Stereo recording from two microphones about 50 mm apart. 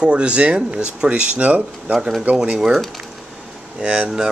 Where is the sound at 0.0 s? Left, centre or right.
Right.